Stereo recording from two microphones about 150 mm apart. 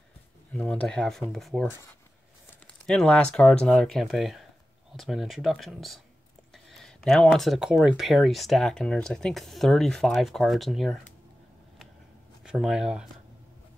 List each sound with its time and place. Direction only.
0.5 s speech: 5° left (ahead or behind)
12.4 s speech: 5° right (ahead or behind)